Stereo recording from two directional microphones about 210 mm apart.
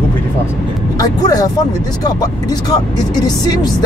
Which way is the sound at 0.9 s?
20° left (ahead or behind).